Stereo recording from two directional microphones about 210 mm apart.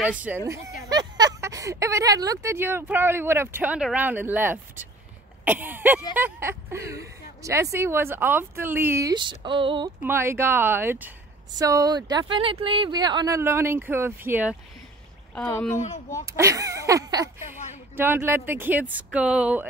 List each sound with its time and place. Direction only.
0.0 s speech: 5° right (ahead or behind)
0.4 s speech: 15° right (ahead or behind)
10.0 s speech: 10° right (ahead or behind)
15.3 s speech: 5° left (ahead or behind)
16.3 s speech: 15° right (ahead or behind)